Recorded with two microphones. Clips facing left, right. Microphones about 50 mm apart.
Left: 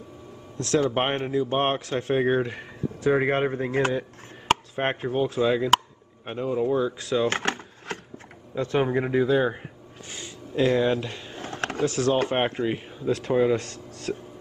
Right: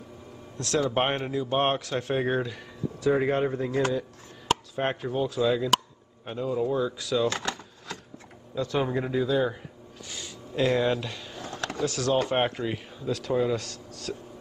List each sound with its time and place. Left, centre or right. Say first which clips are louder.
0.6 s speech: left 2 dB; left